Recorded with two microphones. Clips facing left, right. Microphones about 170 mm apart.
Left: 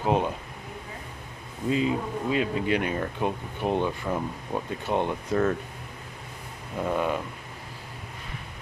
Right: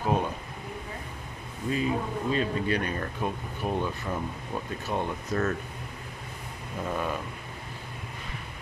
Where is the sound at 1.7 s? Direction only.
20° left (ahead or behind).